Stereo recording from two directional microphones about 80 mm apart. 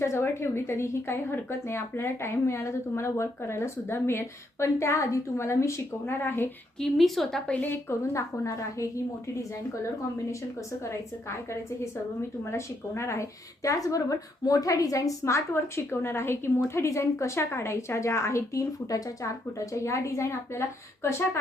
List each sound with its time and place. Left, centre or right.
0.0 s a woman's voice: left
6.7 s speech: centre
7.5 s a woman's voice: left
8.1 s a woman's voice: left
12.5 s a woman's voice: left